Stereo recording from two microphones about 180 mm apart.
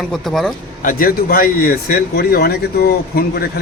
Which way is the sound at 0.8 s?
55° left (ahead or behind).